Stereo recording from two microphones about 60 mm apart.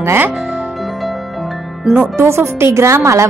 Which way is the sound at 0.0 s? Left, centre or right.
Right.